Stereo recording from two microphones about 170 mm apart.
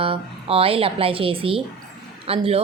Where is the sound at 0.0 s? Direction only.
35° right (ahead or behind).